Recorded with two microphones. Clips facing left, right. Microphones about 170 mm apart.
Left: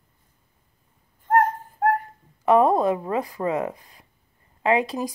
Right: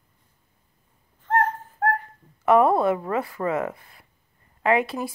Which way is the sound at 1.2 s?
10° left (ahead or behind).